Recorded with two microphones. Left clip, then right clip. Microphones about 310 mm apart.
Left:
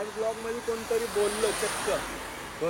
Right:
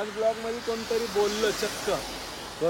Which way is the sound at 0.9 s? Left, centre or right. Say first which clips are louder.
Right 2 dB; centre.